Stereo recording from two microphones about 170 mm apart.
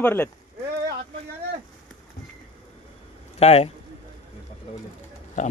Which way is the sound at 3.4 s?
35° left (ahead or behind).